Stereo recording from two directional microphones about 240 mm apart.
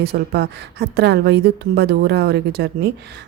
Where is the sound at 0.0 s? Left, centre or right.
Right.